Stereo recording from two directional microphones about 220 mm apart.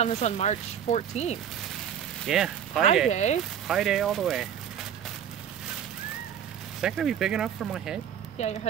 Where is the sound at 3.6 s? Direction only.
Centre (ahead or behind).